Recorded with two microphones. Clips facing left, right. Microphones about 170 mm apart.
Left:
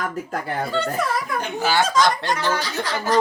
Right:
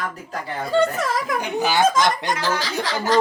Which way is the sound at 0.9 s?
90° right.